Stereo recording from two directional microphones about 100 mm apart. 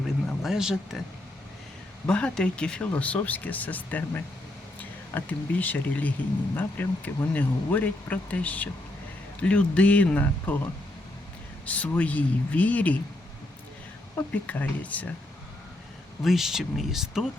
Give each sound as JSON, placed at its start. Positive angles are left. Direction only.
{"t": 0.4, "sound": "speech", "side_deg": -5}
{"t": 2.0, "sound": "speech", "side_deg": 10}
{"t": 11.6, "sound": "speech", "side_deg": 15}
{"t": 14.2, "sound": "speech", "side_deg": 15}
{"t": 16.2, "sound": "speech", "side_deg": -5}